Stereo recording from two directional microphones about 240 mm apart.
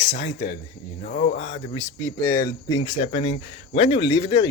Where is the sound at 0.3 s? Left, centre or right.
Left.